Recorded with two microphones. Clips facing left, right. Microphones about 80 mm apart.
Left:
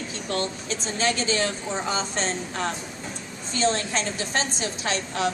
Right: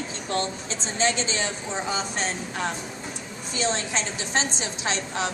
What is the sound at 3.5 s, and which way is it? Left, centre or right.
A woman's voice, centre.